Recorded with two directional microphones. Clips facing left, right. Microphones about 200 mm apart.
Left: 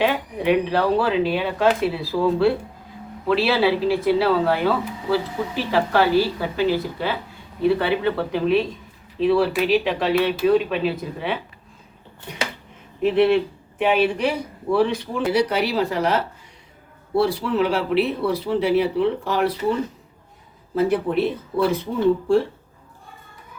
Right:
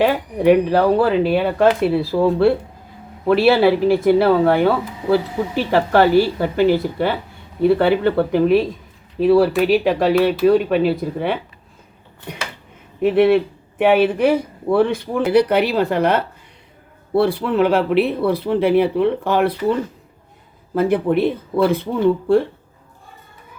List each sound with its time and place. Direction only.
0.0 s speech: 45° right (ahead or behind)
13.1 s speech: 50° right (ahead or behind)
20.7 s speech: 55° right (ahead or behind)